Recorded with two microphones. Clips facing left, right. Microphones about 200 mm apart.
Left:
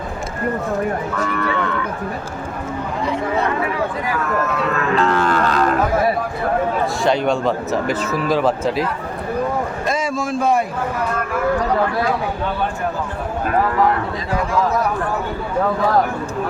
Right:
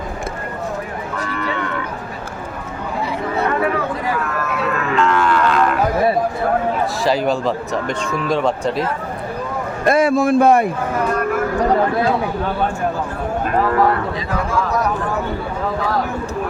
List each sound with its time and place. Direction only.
4.9 s cattle: 35° left (ahead or behind)
7.0 s speech: centre (ahead or behind)
9.8 s a sound: 60° right (ahead or behind)